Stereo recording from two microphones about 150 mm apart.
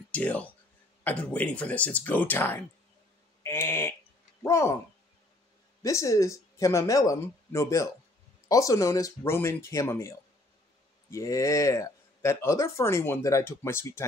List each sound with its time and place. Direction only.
0.1 s speech: 10° left (ahead or behind)
3.4 s a sound: 15° left (ahead or behind)
4.4 s owl: 20° left (ahead or behind)
5.8 s speech: 20° left (ahead or behind)